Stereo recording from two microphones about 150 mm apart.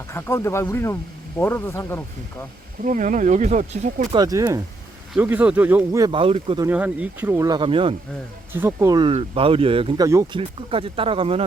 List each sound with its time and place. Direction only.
0.1 s speech: 15° left (ahead or behind)
2.8 s speech: 60° right (ahead or behind)
4.1 s speech: 25° right (ahead or behind)
5.1 s speech: 10° right (ahead or behind)
6.1 s speech: 35° right (ahead or behind)
6.7 s speech: 10° right (ahead or behind); by 7.9 s 35° right (ahead or behind)
8.5 s speech: 15° right (ahead or behind)
9.0 s speech: 40° right (ahead or behind)
10.0 s speech: 20° right (ahead or behind)
10.3 s speech: 40° right (ahead or behind)